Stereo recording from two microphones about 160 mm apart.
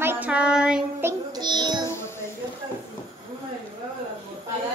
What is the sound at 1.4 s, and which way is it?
Speech, 25° right (ahead or behind).